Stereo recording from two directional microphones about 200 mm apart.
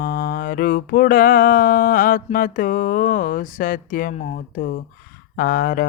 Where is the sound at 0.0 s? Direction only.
45° left (ahead or behind).